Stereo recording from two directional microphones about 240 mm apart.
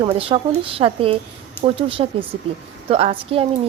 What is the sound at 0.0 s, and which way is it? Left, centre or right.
Speech, right.